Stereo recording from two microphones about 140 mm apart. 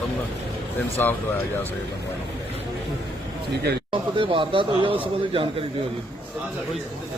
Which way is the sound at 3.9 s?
40° right (ahead or behind).